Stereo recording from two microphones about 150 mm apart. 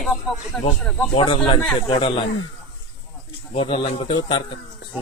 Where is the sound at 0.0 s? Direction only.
Centre (ahead or behind).